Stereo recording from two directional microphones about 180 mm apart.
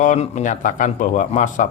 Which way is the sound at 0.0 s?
40° left (ahead or behind).